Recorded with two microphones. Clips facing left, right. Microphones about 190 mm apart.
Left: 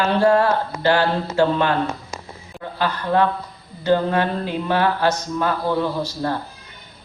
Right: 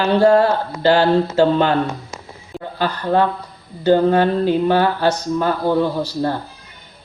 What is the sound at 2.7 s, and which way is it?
Speech, 35° right (ahead or behind).